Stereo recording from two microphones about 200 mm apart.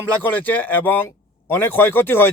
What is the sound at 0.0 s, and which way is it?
Speech, 10° left (ahead or behind).